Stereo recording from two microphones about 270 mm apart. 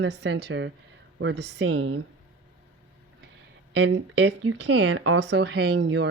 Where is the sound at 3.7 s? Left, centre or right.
Right.